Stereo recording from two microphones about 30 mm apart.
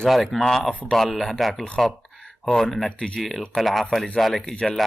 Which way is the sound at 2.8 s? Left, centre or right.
Left.